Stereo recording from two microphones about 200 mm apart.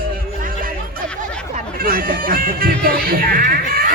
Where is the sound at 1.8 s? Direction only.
45° right (ahead or behind).